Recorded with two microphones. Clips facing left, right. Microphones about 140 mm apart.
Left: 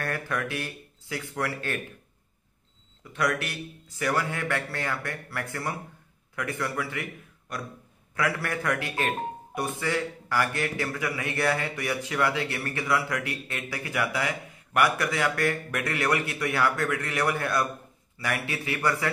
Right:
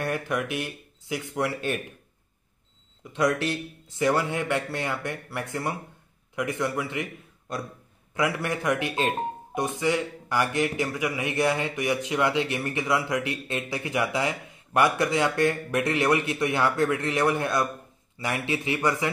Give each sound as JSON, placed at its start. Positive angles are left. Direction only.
{"t": 0.0, "sound": "speech", "side_deg": -20}
{"t": 3.0, "sound": "a man's voice", "side_deg": -20}